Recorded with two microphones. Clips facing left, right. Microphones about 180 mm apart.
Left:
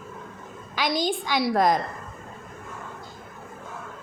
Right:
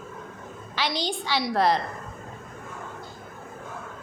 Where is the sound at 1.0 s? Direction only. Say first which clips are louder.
Left 3 dB; 10° left (ahead or behind).